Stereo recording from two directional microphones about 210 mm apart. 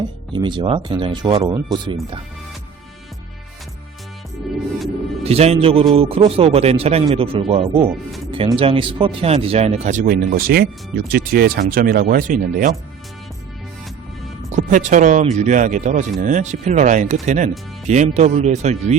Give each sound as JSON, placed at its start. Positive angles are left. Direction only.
{"t": 0.3, "sound": "speech", "side_deg": -20}
{"t": 5.2, "sound": "speech", "side_deg": -30}
{"t": 14.5, "sound": "speech", "side_deg": -35}